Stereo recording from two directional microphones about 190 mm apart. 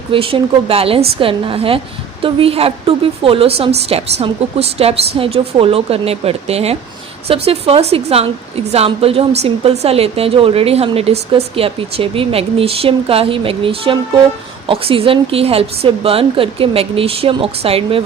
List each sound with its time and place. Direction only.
0.1 s a woman's voice: 30° right (ahead or behind)